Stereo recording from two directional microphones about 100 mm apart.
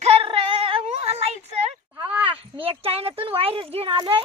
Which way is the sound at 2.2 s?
65° right (ahead or behind).